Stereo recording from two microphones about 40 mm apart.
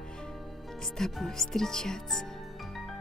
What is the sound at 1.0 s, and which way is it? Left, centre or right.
Speech, centre.